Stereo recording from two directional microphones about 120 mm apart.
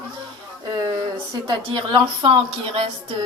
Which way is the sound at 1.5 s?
40° right (ahead or behind).